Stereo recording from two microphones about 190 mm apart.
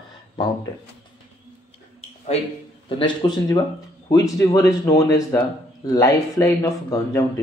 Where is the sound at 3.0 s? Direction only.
25° left (ahead or behind).